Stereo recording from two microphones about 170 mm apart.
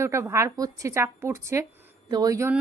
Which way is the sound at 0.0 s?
15° right (ahead or behind).